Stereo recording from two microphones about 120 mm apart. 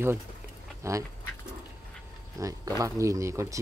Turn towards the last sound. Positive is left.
turn(degrees=-25)  # may be behind; listen again after turning